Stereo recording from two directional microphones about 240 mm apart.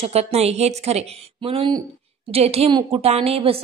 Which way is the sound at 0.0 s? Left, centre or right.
Right.